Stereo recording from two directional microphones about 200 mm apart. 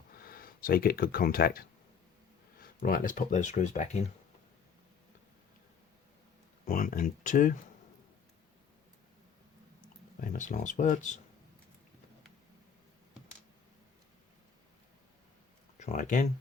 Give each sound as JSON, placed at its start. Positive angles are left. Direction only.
{"t": 0.2, "sound": "speech", "side_deg": 45}
{"t": 6.7, "sound": "speech", "side_deg": 40}
{"t": 10.2, "sound": "speech", "side_deg": 40}
{"t": 15.8, "sound": "speech", "side_deg": 40}